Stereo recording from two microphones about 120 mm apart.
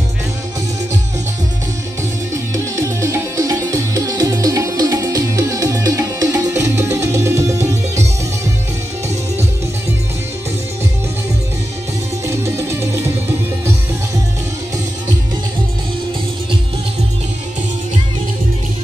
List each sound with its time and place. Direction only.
2.3 s music: 25° right (ahead or behind)
12.3 s music: 20° right (ahead or behind)